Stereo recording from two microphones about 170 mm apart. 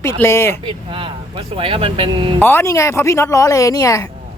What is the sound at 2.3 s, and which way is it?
Speech, 10° left (ahead or behind).